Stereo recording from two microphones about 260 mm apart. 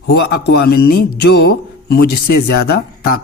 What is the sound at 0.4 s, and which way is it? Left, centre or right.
Speech, left.